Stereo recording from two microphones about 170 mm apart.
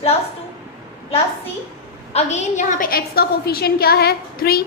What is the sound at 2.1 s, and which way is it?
A woman's voice, 45° left (ahead or behind).